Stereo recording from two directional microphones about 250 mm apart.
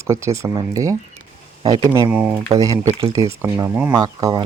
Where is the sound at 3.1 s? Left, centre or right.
Centre.